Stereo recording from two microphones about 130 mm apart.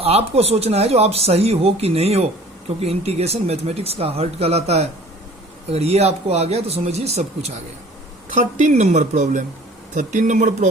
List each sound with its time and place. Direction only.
0.0 s speech: 50° right (ahead or behind)
8.3 s a woman's voice: 70° right (ahead or behind)